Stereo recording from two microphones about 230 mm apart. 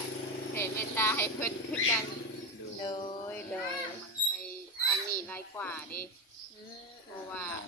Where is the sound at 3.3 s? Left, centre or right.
Centre.